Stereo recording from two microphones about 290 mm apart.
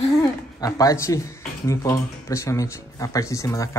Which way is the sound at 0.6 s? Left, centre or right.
Centre.